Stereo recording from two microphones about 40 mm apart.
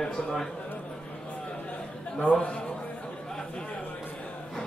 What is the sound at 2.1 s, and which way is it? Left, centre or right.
Speech, left.